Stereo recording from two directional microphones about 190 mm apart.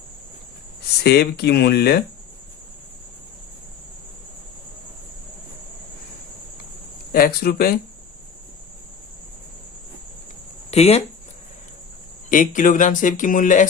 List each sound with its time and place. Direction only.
1.0 s speech: 55° left (ahead or behind)
7.1 s speech: 55° left (ahead or behind)
10.7 s speech: 35° left (ahead or behind)
12.3 s speech: 45° left (ahead or behind)